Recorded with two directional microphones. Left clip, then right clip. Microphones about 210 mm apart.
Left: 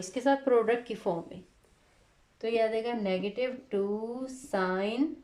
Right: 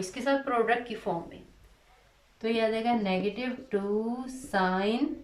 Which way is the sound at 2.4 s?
40° left (ahead or behind).